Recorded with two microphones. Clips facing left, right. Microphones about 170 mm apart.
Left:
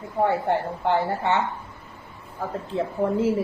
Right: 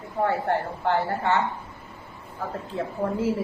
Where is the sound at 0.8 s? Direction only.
15° left (ahead or behind).